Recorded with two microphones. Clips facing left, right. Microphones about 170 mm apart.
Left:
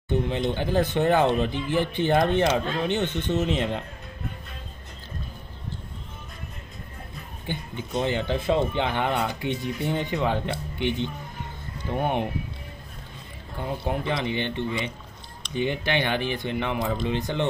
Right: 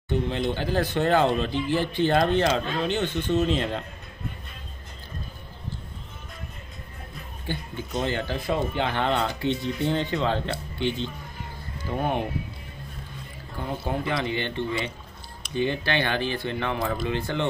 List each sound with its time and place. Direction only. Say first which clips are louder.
0.1 s speech: left 1 dB; 20° left (ahead or behind)
7.4 s speech: even; 20° left (ahead or behind)
13.8 s speech: even; 20° left (ahead or behind)